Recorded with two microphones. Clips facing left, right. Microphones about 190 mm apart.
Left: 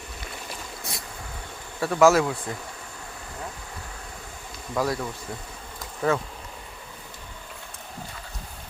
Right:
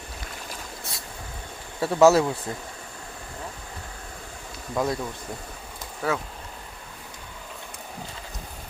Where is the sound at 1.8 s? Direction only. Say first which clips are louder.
Right 1 dB; 25° right (ahead or behind).